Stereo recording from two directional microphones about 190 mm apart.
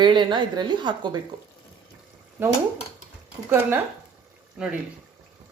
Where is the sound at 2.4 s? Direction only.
10° right (ahead or behind).